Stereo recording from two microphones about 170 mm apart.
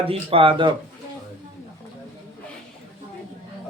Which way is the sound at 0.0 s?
35° right (ahead or behind).